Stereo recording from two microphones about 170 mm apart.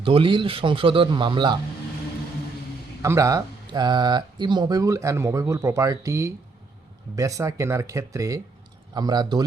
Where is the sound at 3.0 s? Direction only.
20° right (ahead or behind).